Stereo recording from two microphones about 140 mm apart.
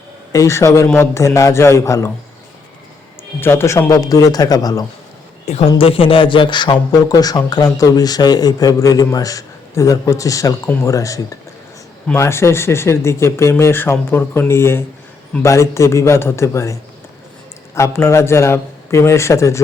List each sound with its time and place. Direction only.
0.3 s speech: 20° left (ahead or behind)
3.4 s speech: 15° left (ahead or behind)
5.8 s speech: 40° left (ahead or behind); by 16.7 s 20° left (ahead or behind)
17.7 s speech: 20° left (ahead or behind)